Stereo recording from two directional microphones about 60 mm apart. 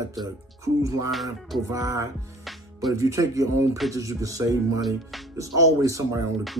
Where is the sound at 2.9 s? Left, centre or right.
Right.